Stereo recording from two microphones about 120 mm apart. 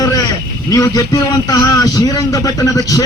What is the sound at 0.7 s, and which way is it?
A man's voice, 30° left (ahead or behind).